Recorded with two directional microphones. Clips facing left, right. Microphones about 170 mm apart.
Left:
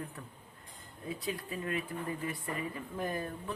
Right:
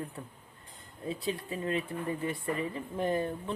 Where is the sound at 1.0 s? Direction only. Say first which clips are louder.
Right 4 dB; 25° right (ahead or behind).